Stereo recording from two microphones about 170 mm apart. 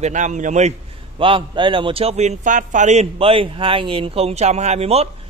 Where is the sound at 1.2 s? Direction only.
30° right (ahead or behind).